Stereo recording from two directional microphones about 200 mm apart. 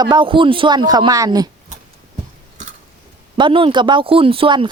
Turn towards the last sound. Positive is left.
turn(degrees=-25)  # may be behind; listen again after turning